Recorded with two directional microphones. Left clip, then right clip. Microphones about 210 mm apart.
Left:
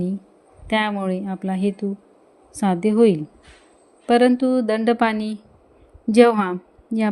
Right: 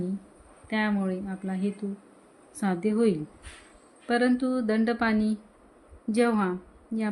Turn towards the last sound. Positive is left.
turn(degrees=30)  # may be behind; listen again after turning